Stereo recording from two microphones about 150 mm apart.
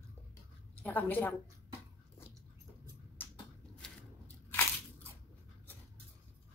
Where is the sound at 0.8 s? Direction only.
10° left (ahead or behind).